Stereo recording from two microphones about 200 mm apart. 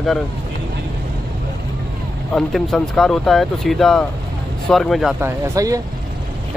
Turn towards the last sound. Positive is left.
turn(degrees=-15)  # may be behind; listen again after turning